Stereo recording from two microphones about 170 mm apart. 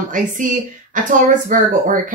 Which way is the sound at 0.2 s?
50° right (ahead or behind).